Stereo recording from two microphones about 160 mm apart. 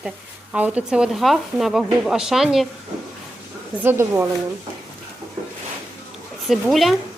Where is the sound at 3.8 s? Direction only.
15° right (ahead or behind).